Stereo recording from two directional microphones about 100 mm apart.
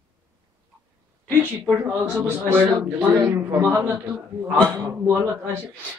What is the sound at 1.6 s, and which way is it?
A man's voice, 30° right (ahead or behind).